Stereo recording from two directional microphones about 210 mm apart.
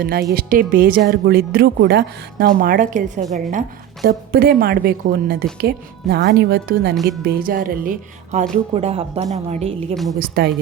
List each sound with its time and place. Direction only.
0.0 s speech: 45° right (ahead or behind)
2.6 s a woman's voice: 40° right (ahead or behind)
9.9 s a woman's voice: centre (ahead or behind)
10.2 s speech: 45° right (ahead or behind)